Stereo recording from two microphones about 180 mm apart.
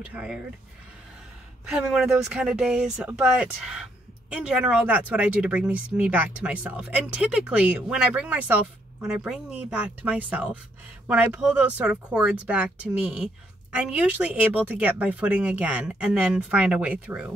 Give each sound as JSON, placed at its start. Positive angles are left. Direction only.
{"t": 0.1, "sound": "speech", "side_deg": -5}
{"t": 1.7, "sound": "speech", "side_deg": -5}